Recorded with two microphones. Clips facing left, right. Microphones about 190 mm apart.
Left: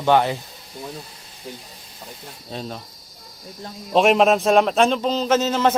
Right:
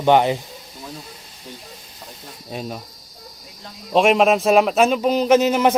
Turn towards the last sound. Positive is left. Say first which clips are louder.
# right 4 dB
turn(degrees=-10)  # may be behind; listen again after turning